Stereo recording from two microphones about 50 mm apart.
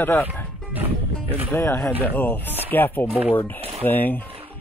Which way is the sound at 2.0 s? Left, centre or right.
Left.